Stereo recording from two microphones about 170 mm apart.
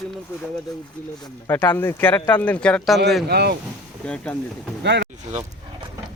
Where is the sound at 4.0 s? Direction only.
5° left (ahead or behind).